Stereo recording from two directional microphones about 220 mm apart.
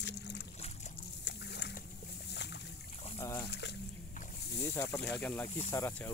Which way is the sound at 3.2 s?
10° left (ahead or behind).